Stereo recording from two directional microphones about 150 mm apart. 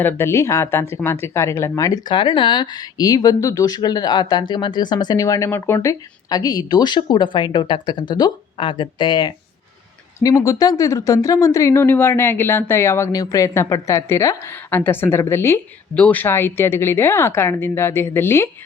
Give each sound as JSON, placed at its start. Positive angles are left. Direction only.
{"t": 0.0, "sound": "speech", "side_deg": 15}